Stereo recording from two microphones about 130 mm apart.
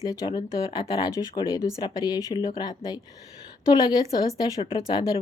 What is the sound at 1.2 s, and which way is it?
A woman's voice, 40° left (ahead or behind).